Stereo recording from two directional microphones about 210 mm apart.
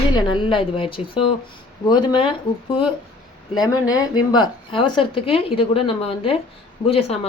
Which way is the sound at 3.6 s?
20° left (ahead or behind).